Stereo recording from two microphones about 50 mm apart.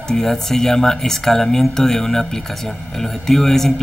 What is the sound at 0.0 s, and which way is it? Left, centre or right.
Speech, centre.